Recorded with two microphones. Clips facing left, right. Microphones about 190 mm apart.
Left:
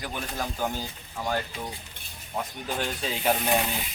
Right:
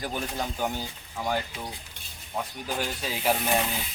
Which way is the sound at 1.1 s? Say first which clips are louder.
Even; centre (ahead or behind).